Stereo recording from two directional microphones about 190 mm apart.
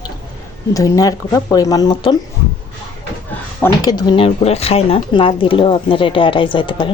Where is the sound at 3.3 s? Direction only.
15° left (ahead or behind).